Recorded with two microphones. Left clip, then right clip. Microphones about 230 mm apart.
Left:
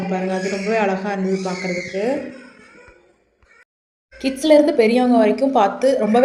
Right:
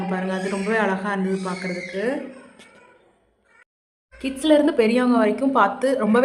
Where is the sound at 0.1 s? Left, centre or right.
Centre.